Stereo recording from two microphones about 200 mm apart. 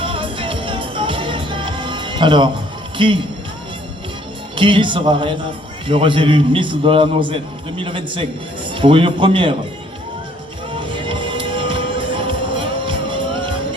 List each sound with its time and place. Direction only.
0.0 s music: 25° right (ahead or behind)
3.0 s a man's voice: 25° right (ahead or behind)
4.5 s a man's voice: 25° right (ahead or behind)
10.8 s music: 25° right (ahead or behind)